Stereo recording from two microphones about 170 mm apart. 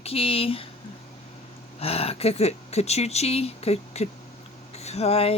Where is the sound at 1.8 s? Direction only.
35° left (ahead or behind).